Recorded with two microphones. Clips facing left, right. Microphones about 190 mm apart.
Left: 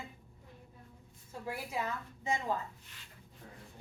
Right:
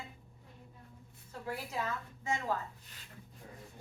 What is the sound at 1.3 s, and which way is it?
A woman's voice, 10° left (ahead or behind).